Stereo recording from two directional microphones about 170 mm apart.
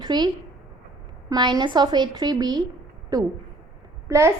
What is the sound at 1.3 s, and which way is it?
A woman's voice, 25° right (ahead or behind).